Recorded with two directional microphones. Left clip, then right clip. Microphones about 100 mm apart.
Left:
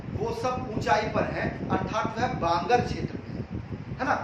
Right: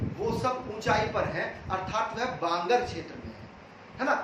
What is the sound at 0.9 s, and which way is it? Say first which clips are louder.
Speech: left 2 dB; centre (ahead or behind).